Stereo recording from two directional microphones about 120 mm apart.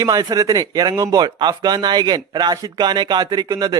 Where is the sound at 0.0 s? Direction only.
30° right (ahead or behind).